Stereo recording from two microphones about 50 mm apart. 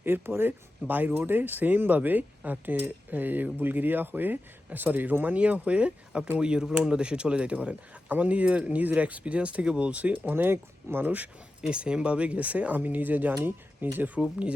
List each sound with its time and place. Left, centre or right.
0.0 s speech: right
6.4 s speech: centre
10.2 s speech: right
11.7 s speech: centre; by 14.1 s right
14.2 s speech: right